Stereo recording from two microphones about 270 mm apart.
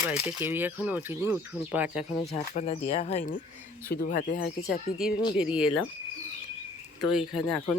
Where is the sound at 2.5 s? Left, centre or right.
Left.